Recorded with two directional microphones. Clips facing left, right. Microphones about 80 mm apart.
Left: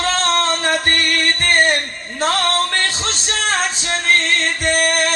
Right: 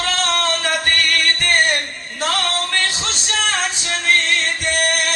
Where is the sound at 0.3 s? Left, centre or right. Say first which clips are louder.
Left 3 dB; left.